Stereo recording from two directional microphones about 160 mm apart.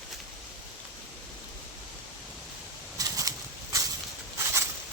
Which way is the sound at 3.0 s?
20° right (ahead or behind).